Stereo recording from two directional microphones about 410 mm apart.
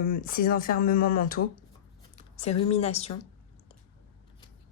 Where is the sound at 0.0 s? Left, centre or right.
Centre.